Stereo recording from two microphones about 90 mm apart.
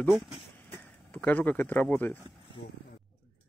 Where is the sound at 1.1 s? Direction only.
20° left (ahead or behind).